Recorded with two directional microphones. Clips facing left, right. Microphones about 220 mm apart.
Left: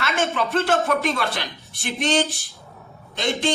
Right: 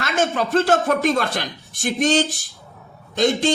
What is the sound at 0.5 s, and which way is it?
Speech, 45° right (ahead or behind).